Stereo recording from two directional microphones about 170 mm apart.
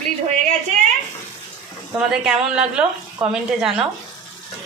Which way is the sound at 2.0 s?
5° right (ahead or behind).